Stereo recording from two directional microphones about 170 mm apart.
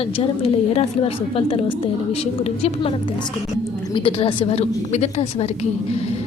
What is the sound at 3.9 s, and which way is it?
A woman's voice, 30° left (ahead or behind).